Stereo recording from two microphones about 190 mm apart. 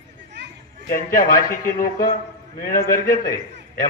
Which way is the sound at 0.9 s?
45° left (ahead or behind).